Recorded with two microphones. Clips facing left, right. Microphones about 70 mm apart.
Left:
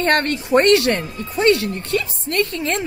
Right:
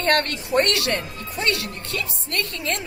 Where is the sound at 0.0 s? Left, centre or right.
Left.